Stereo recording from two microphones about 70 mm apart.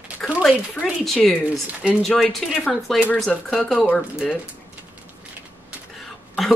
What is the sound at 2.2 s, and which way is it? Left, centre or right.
Speech, centre.